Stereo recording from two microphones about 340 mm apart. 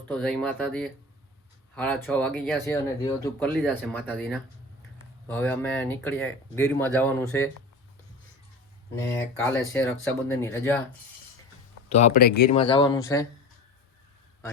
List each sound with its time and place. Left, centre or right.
0.1 s speech: centre
9.0 s speech: centre
11.9 s speech: centre